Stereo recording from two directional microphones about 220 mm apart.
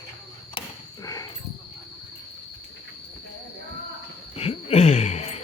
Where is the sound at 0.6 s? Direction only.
15° left (ahead or behind).